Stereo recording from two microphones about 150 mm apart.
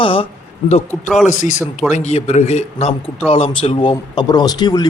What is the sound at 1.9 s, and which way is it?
Speech, 50° left (ahead or behind).